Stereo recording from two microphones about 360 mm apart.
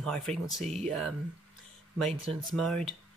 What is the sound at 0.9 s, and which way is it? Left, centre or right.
Speech, centre.